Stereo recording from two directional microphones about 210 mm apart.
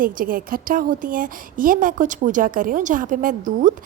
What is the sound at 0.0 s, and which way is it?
Speech, 40° right (ahead or behind).